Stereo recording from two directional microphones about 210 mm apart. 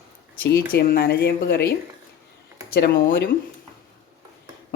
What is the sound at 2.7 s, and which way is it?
Speech, 45° left (ahead or behind).